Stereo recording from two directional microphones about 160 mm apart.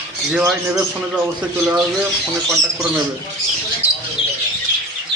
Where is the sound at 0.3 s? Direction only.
5° right (ahead or behind).